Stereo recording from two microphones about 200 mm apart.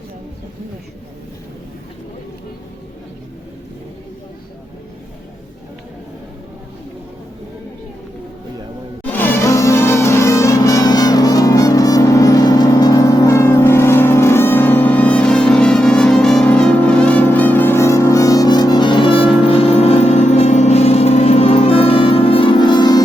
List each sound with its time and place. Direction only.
9.0 s music: 10° left (ahead or behind)